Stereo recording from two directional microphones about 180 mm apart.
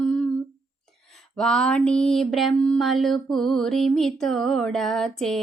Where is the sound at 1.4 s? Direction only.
5° left (ahead or behind).